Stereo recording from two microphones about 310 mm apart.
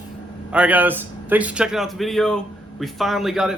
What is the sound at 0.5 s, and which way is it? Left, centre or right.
A man's voice, centre.